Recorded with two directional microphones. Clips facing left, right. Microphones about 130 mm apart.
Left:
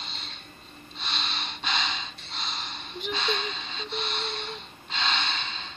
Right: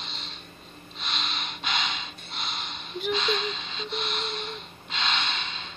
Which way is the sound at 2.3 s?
35° left (ahead or behind).